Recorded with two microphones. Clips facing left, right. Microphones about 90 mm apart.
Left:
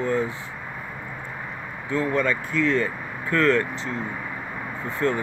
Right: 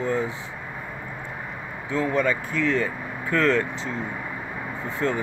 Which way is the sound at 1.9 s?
20° right (ahead or behind).